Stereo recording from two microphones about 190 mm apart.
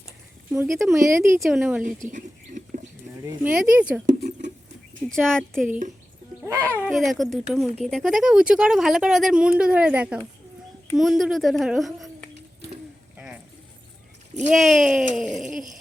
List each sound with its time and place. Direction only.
0.5 s speech: 10° right (ahead or behind)
1.4 s speech: centre (ahead or behind)
2.1 s rodents: 40° right (ahead or behind)
3.2 s speech: 5° right (ahead or behind)
4.2 s a sound: 40° right (ahead or behind)
5.0 s speech: 5° left (ahead or behind)
6.4 s a child's voice: 15° right (ahead or behind)
6.7 s speech: 5° left (ahead or behind)
14.5 s speech: centre (ahead or behind)